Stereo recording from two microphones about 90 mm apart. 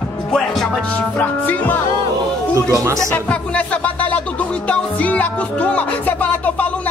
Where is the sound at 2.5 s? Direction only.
35° right (ahead or behind).